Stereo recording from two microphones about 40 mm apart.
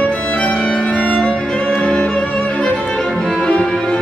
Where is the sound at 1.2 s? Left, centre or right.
Left.